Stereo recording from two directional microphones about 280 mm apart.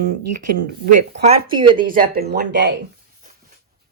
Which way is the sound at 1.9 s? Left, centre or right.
Right.